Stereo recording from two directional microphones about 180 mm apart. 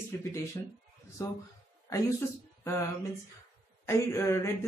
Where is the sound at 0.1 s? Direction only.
15° left (ahead or behind).